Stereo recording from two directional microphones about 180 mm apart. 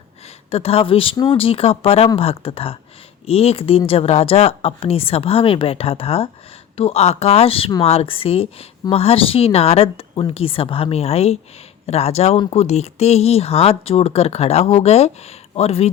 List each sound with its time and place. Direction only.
0.5 s a woman's voice: 35° left (ahead or behind)